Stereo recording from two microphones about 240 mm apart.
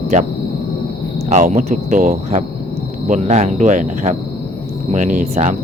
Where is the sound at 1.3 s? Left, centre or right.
Right.